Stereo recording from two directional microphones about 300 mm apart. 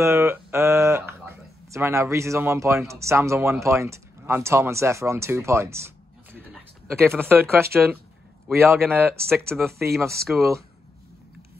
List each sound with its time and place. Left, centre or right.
0.0 s speech: centre